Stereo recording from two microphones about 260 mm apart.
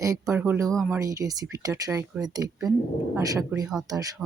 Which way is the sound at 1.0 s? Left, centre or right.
Centre.